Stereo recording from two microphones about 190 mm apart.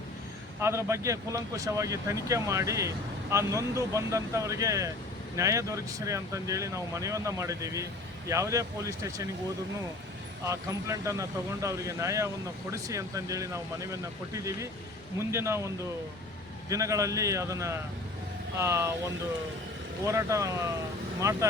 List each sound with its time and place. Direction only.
0.6 s speech: 15° right (ahead or behind)
10.4 s speech: 15° right (ahead or behind)
20.1 s speech: 15° right (ahead or behind)